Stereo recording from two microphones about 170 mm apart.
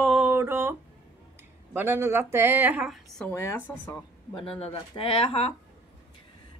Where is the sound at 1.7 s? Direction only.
15° right (ahead or behind); by 3.3 s 5° left (ahead or behind).